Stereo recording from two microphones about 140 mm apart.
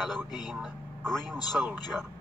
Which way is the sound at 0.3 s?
30° left (ahead or behind).